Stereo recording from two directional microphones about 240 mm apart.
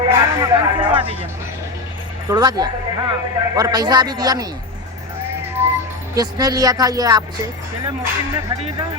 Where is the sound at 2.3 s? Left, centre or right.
Centre.